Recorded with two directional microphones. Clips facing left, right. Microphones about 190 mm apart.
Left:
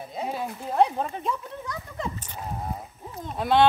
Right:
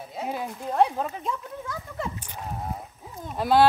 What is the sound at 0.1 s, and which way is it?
Speech, 5° right (ahead or behind).